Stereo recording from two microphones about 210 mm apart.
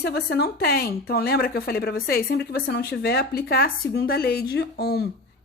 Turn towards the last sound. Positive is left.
turn(degrees=50)  # may be behind; listen again after turning